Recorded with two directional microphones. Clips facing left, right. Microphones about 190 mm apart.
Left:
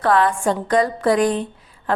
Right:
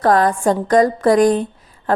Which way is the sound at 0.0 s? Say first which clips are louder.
Right 3 dB; 40° right (ahead or behind).